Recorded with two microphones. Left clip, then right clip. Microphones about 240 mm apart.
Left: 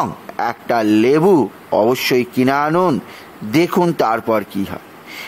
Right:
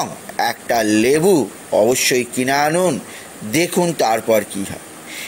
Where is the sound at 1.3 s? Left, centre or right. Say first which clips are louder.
Left 2 dB; left.